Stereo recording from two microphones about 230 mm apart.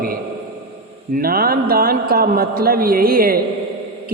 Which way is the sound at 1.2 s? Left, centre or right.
Right.